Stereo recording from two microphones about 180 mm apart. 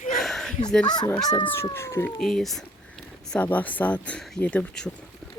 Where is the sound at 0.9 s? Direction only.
20° left (ahead or behind).